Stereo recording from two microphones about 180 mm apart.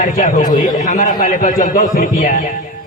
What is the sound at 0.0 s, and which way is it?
A man's voice, 45° left (ahead or behind).